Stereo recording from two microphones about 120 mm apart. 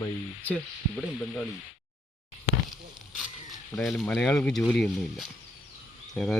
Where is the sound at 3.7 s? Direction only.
Centre (ahead or behind).